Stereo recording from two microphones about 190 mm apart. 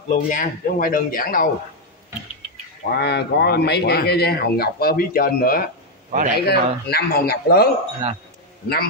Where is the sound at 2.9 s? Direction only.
60° left (ahead or behind).